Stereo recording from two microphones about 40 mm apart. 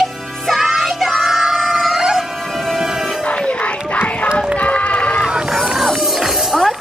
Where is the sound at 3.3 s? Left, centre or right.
Left.